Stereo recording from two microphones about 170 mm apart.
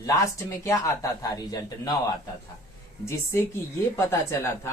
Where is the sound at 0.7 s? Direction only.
20° left (ahead or behind).